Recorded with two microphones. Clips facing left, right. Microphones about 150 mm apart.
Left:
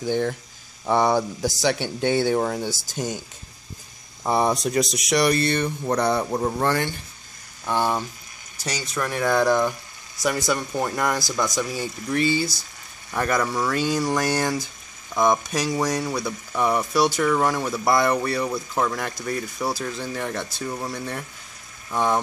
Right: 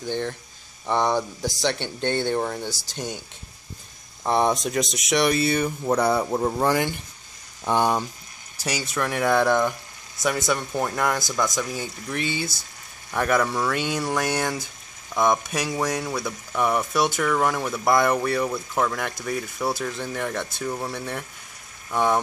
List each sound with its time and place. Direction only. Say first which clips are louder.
0.0 s speech: left 4 dB; 10° left (ahead or behind)
4.2 s speech: even; 5° left (ahead or behind); by 8.0 s 15° right (ahead or behind)
8.9 s speech: even; centre (ahead or behind)